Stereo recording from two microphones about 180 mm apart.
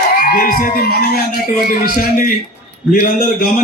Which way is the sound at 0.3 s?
55° left (ahead or behind).